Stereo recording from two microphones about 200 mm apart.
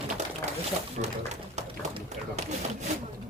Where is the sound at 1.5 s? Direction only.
35° right (ahead or behind).